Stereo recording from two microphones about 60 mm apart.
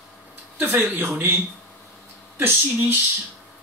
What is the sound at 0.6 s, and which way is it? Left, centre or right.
Speech, right.